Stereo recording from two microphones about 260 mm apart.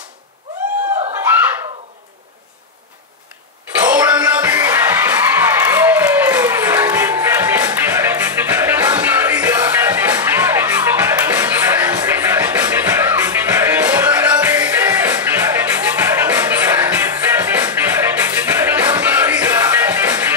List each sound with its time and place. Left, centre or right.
3.8 s music: centre